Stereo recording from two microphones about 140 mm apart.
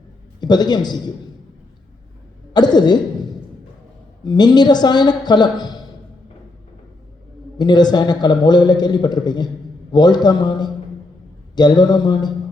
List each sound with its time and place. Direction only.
0.3 s a man's voice: 30° left (ahead or behind)
2.5 s a woman's voice: 30° left (ahead or behind)
7.6 s a man's voice: 30° left (ahead or behind)